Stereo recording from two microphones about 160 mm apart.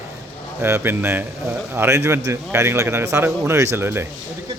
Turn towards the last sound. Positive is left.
turn(degrees=-15)  # may be behind; listen again after turning